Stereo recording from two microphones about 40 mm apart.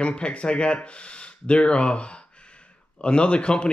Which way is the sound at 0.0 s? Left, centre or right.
Left.